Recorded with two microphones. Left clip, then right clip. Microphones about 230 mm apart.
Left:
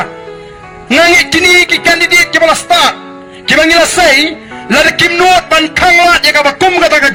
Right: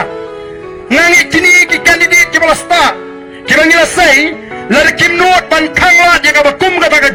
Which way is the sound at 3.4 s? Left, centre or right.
Left.